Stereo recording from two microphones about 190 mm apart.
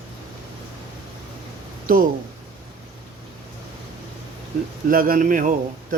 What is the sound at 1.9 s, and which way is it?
Speech, 45° right (ahead or behind).